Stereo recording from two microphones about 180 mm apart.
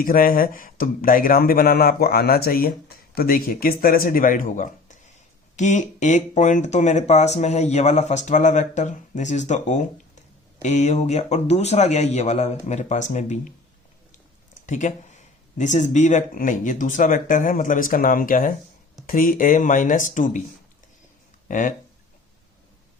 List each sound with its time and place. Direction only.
0.0 s speech: 50° left (ahead or behind)
14.7 s speech: 40° left (ahead or behind)
21.4 s speech: 45° left (ahead or behind)